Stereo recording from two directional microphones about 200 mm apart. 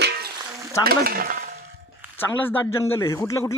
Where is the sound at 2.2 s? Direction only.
10° left (ahead or behind).